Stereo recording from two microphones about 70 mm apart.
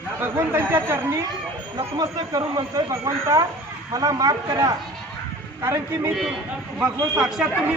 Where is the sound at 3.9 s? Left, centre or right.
Right.